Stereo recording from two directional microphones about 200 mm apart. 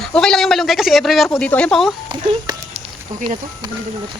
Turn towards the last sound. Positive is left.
turn(degrees=-25)  # may be behind; listen again after turning